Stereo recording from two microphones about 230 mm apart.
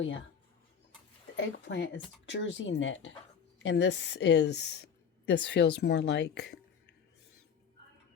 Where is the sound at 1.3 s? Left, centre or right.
Left.